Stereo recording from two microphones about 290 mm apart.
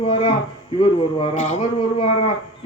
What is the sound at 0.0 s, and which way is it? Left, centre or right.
Speech, centre.